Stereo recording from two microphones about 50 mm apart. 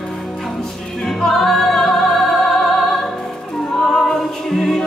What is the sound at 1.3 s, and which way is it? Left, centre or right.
Music, centre.